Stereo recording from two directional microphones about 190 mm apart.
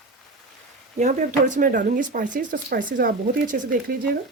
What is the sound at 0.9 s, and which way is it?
Speech, 40° right (ahead or behind).